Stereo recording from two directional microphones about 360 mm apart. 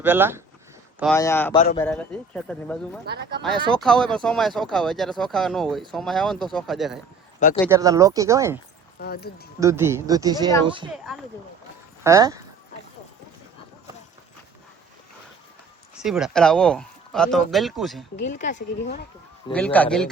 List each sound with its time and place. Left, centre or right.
0.0 s speech: centre
1.5 s speech: centre
1.8 s speech: centre
3.1 s speech: right
3.4 s speech: centre
7.3 s speech: centre
7.7 s speech: centre
9.0 s speech: left
9.6 s speech: centre
12.0 s speech: centre
16.0 s speech: centre
18.2 s speech: left
19.5 s speech: centre